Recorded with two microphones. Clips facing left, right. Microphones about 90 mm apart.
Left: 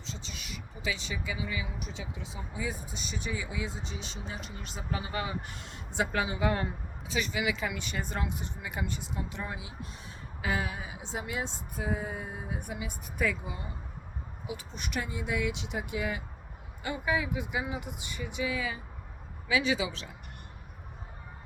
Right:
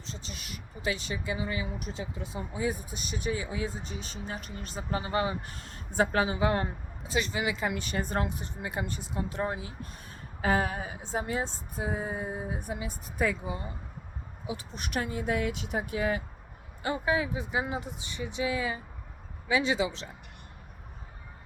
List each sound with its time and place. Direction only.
0.0 s a woman's voice: 40° right (ahead or behind)
14.5 s speech: 45° right (ahead or behind)